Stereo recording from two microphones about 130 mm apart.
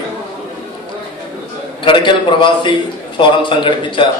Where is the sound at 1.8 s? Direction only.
40° left (ahead or behind).